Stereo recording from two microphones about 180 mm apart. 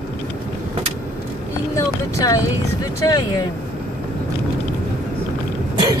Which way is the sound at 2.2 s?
20° left (ahead or behind).